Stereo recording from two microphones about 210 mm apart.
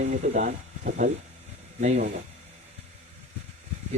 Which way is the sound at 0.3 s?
40° right (ahead or behind).